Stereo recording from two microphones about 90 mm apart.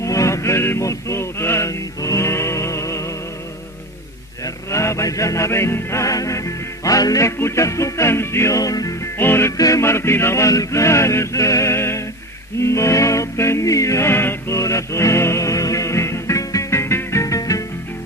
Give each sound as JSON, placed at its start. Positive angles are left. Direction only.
{"t": 0.0, "sound": "music", "side_deg": 35}
{"t": 4.4, "sound": "music", "side_deg": 35}
{"t": 9.1, "sound": "music", "side_deg": 25}
{"t": 9.6, "sound": "music", "side_deg": 40}